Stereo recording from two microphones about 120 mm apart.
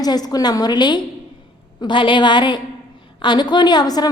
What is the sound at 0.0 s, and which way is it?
A woman's voice, 35° left (ahead or behind).